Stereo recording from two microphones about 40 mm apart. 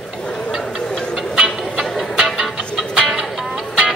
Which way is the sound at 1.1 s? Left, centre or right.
Centre.